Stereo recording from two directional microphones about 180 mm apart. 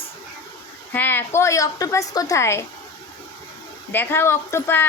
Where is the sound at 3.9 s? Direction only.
10° left (ahead or behind).